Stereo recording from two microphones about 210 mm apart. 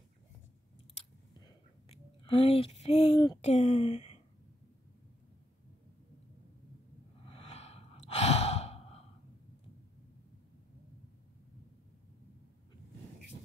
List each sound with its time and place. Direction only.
1.4 s a sound: 25° left (ahead or behind)
3.3 s speech: 30° left (ahead or behind)
7.2 s sigh: 25° left (ahead or behind)